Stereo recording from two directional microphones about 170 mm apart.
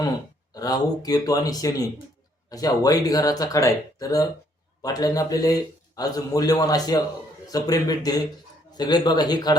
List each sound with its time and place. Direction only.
0.5 s a man's voice: 20° left (ahead or behind)